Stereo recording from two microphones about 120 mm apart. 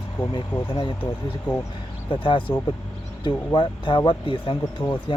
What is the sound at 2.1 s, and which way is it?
Speech, 45° left (ahead or behind).